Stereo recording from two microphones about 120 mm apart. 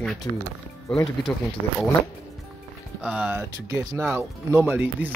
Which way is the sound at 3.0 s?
10° right (ahead or behind).